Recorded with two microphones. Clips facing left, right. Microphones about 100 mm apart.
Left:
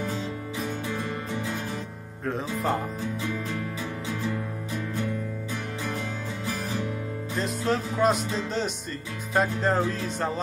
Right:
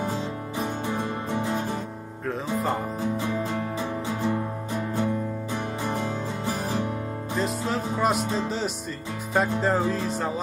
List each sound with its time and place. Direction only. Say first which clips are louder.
1.3 s music: right 7 dB; 40° right (ahead or behind)
4.3 s music: right 4 dB; 40° right (ahead or behind)
7.3 s music: even; centre (ahead or behind)
8.2 s speech: right 3 dB; 45° right (ahead or behind)
8.5 s music: right 1 dB; centre (ahead or behind)